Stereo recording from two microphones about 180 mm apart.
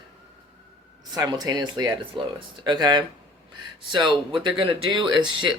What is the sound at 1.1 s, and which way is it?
Speech, 20° right (ahead or behind).